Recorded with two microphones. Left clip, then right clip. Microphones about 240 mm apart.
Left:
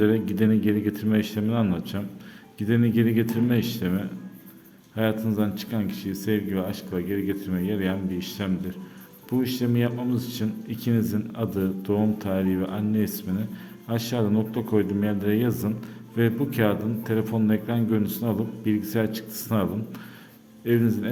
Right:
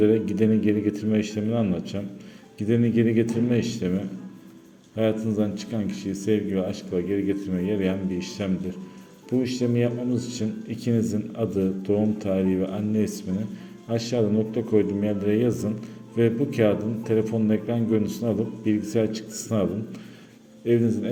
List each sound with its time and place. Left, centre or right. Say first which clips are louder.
0.0 s a man's voice: right 2 dB; centre